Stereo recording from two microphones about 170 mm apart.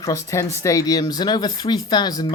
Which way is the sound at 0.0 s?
15° left (ahead or behind).